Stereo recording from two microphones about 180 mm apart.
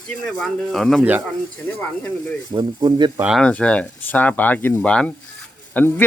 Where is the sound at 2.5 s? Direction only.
25° right (ahead or behind).